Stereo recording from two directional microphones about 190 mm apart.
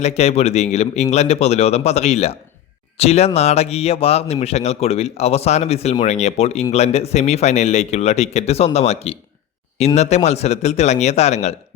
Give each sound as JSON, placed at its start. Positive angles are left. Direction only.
{"t": 0.0, "sound": "speech", "side_deg": 35}